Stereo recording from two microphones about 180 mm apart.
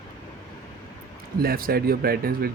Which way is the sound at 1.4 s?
55° right (ahead or behind).